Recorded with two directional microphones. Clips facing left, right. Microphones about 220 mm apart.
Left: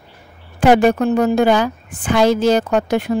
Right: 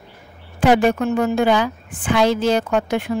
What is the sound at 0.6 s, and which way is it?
A woman's voice, 45° left (ahead or behind).